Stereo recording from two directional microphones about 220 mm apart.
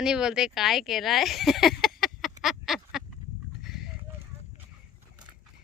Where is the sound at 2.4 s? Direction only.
Centre (ahead or behind).